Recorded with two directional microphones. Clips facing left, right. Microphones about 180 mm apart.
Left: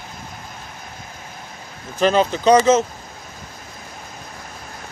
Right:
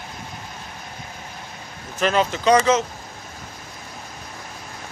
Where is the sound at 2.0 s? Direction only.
35° left (ahead or behind).